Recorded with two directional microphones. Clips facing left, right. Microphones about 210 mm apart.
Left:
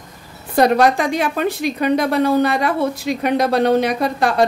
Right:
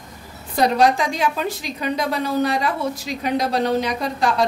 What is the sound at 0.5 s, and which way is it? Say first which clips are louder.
A woman's voice: left 3 dB; 55° left (ahead or behind).